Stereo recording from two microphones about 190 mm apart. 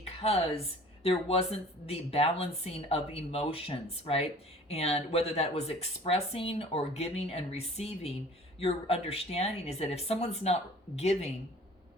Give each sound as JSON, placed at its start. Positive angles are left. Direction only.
{"t": 0.1, "sound": "speech", "side_deg": 30}